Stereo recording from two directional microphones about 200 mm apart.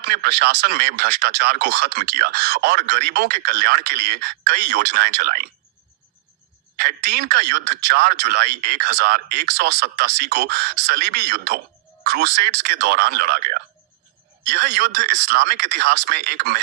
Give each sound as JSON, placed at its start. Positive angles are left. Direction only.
{"t": 0.0, "sound": "speech", "side_deg": -55}
{"t": 6.7, "sound": "speech", "side_deg": -55}